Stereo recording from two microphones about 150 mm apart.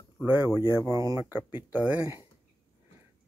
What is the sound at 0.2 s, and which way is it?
Speech, 15° right (ahead or behind).